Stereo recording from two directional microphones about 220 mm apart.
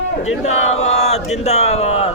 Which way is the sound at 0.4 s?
30° left (ahead or behind).